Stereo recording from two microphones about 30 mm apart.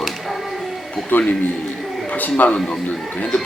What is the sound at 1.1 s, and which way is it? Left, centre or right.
A man's voice, left.